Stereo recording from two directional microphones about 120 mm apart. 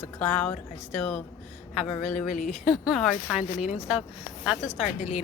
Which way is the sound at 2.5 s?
Centre (ahead or behind).